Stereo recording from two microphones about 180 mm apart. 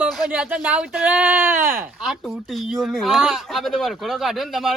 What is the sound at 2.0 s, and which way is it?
A man's voice, centre (ahead or behind).